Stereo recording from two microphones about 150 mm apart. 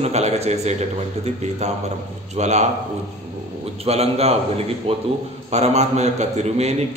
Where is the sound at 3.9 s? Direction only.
45° right (ahead or behind).